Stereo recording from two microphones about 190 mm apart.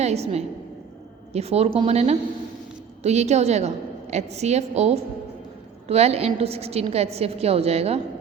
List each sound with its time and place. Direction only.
0.0 s a woman's voice: 35° right (ahead or behind)